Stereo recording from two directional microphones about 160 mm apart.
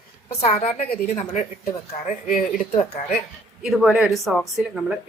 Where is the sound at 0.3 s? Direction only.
40° left (ahead or behind).